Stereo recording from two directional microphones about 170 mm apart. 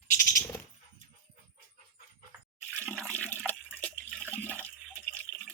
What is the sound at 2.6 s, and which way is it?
Water, 10° left (ahead or behind).